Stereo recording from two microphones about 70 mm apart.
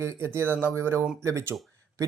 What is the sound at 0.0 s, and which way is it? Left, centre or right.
Speech, right.